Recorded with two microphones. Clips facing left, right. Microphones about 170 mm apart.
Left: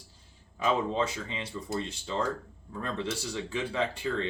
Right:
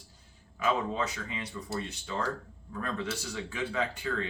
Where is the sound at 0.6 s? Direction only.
30° left (ahead or behind).